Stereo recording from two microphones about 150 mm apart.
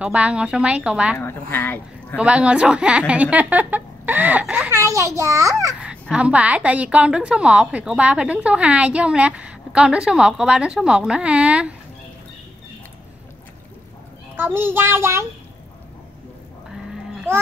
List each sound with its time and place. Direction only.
0.0 s a woman's voice: 10° right (ahead or behind)
1.1 s speech: 15° left (ahead or behind)
2.1 s a woman's voice: 10° right (ahead or behind)
4.7 s a child's voice: 20° right (ahead or behind)
5.8 s a woman's voice: 5° right (ahead or behind)
14.3 s a woman's voice: 15° right (ahead or behind)